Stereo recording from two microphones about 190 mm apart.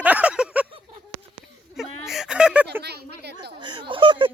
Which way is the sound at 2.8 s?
60° right (ahead or behind).